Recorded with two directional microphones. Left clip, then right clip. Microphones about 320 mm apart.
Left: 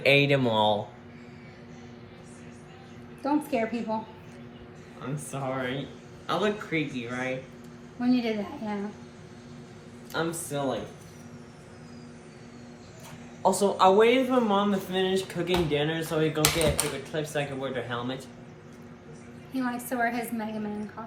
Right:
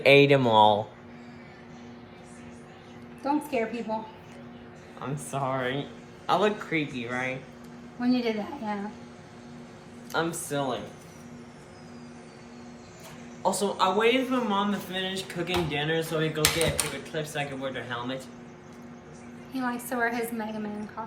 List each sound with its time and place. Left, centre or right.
0.0 s speech: centre
3.2 s a woman's voice: centre
5.1 s a woman's voice: centre
10.1 s speech: centre
13.4 s speech: centre
19.5 s speech: centre